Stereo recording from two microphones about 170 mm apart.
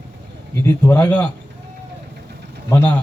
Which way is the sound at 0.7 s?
10° left (ahead or behind).